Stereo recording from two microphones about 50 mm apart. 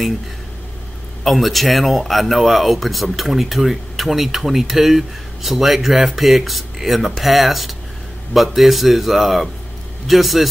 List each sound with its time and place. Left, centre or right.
1.2 s speech: centre